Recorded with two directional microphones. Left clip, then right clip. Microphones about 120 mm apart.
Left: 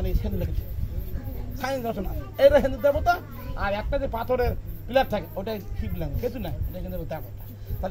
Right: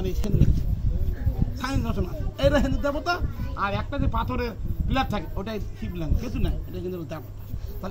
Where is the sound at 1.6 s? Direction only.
30° left (ahead or behind).